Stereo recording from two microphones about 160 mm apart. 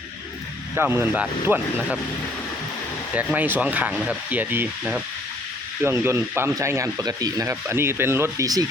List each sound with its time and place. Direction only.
0.8 s speech: 10° right (ahead or behind)
3.2 s speech: 10° right (ahead or behind)